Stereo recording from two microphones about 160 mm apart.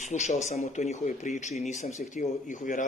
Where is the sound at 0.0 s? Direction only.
45° left (ahead or behind).